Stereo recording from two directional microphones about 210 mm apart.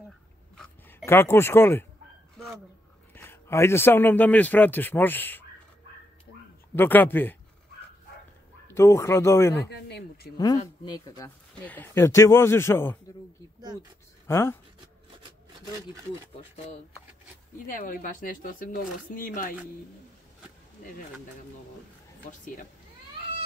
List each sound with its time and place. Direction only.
0.6 s a sound: 10° left (ahead or behind)
3.2 s a man's voice: 10° left (ahead or behind)
6.7 s a man's voice: 10° left (ahead or behind)
8.7 s a man's voice: 15° left (ahead or behind)
9.7 s speech: 50° left (ahead or behind)
10.3 s a man's voice: 15° left (ahead or behind)
14.2 s speech: 10° left (ahead or behind)
17.6 s speech: 40° left (ahead or behind)